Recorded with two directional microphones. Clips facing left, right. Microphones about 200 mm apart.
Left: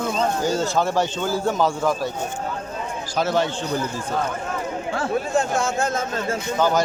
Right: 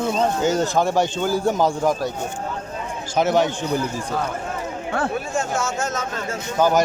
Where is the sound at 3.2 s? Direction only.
20° right (ahead or behind).